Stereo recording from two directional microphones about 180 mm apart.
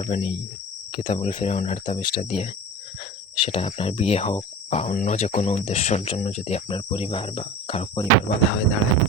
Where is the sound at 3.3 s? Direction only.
30° left (ahead or behind).